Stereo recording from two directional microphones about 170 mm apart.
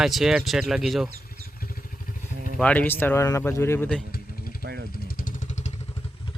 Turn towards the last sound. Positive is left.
turn(degrees=55)  # may be behind; listen again after turning